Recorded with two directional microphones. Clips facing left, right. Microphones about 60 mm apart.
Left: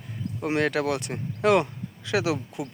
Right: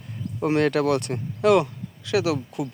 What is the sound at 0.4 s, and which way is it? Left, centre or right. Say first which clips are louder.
Speech: right 4 dB; centre.